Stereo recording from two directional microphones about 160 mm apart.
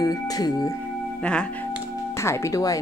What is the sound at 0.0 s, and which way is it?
Speech, 25° left (ahead or behind).